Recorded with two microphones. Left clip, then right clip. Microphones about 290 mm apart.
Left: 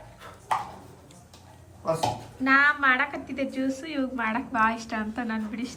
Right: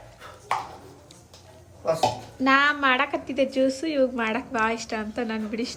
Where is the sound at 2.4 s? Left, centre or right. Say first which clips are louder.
Right 1 dB; centre.